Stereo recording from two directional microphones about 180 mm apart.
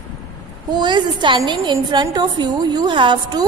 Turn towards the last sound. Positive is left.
turn(degrees=-25)  # may be behind; listen again after turning